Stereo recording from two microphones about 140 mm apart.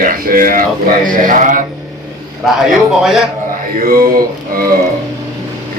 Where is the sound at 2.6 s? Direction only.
Centre (ahead or behind).